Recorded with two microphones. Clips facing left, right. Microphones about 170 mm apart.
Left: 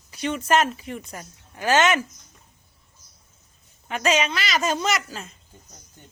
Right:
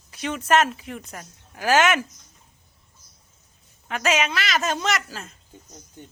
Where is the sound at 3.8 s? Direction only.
Centre (ahead or behind).